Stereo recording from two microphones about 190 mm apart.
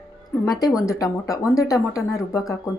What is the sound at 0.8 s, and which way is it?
A woman's voice, 15° left (ahead or behind).